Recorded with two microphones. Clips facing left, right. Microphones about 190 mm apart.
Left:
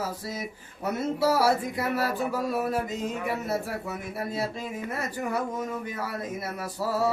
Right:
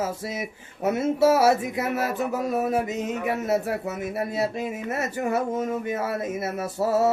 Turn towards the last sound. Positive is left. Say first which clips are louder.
# right 5 dB
turn(degrees=-25)  # may be behind; listen again after turning